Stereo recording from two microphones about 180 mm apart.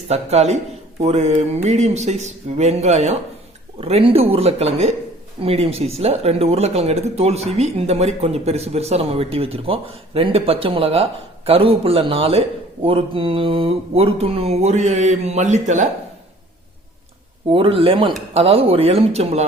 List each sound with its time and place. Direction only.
0.1 s speech: 35° right (ahead or behind)
17.5 s speech: 30° right (ahead or behind)